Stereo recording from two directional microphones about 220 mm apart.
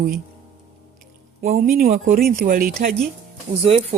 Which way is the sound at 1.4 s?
35° right (ahead or behind).